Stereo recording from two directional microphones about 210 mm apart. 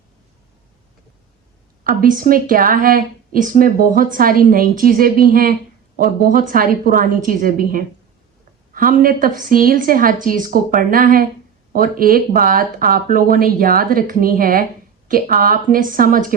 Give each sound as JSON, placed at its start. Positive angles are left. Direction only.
{"t": 1.8, "sound": "a woman's voice", "side_deg": -40}